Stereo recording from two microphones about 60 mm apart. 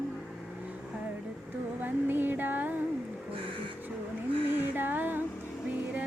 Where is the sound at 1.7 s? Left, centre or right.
Right.